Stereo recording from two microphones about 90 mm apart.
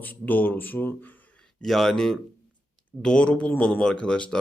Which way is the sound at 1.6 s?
5° left (ahead or behind).